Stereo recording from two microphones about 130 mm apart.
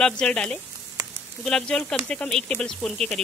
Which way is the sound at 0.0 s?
5° left (ahead or behind).